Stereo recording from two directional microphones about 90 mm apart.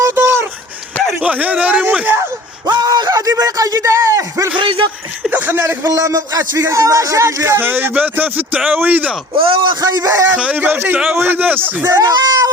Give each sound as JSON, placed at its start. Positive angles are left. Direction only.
{"t": 0.0, "sound": "a sound", "side_deg": -25}
{"t": 1.2, "sound": "speech", "side_deg": -15}
{"t": 2.6, "sound": "a sound", "side_deg": -50}
{"t": 4.6, "sound": "a man's voice", "side_deg": -75}
{"t": 5.3, "sound": "speech", "side_deg": -25}
{"t": 9.4, "sound": "a man's voice", "side_deg": -75}
{"t": 10.0, "sound": "speech", "side_deg": -35}
{"t": 10.2, "sound": "speech", "side_deg": -15}
{"t": 11.9, "sound": "speech", "side_deg": -40}